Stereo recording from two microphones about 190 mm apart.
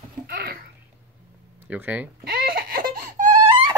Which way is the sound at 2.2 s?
50° right (ahead or behind).